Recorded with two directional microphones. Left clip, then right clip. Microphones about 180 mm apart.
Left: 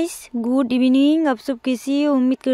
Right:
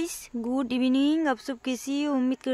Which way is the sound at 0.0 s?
30° left (ahead or behind).